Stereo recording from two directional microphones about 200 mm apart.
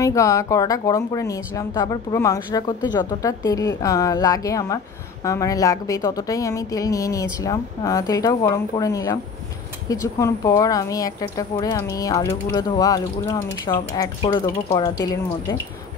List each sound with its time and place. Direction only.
0.0 s speech: 15° left (ahead or behind)